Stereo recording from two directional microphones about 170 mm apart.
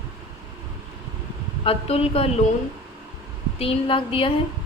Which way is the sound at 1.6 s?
35° left (ahead or behind).